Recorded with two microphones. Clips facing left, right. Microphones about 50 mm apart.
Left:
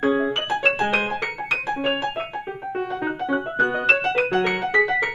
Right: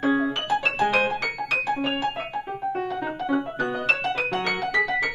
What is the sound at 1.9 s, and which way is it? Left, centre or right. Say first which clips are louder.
Keyboard: left 2 dB; left.